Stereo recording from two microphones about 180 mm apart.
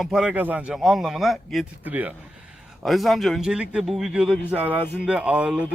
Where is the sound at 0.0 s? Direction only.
5° right (ahead or behind).